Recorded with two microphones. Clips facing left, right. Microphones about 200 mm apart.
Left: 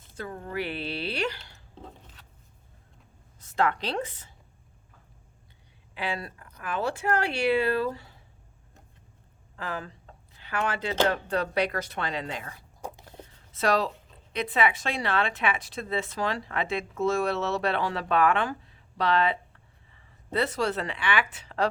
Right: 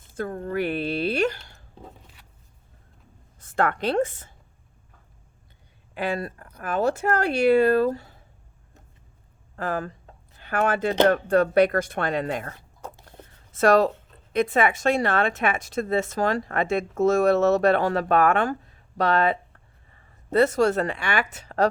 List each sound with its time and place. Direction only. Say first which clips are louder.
0.0 s speech: right 7 dB; 50° right (ahead or behind)
2.2 s a sound: even; 10° right (ahead or behind)
3.4 s a woman's voice: right 3 dB; 50° right (ahead or behind)
5.9 s speech: right 6 dB; 50° right (ahead or behind)
9.6 s speech: right 7 dB; 50° right (ahead or behind)
12.8 s a sound: left 1 dB; 10° left (ahead or behind)
13.5 s speech: right 7 dB; 50° right (ahead or behind)
13.9 s a sound: right 3 dB; centre (ahead or behind)
14.3 s speech: right 5 dB; 45° right (ahead or behind)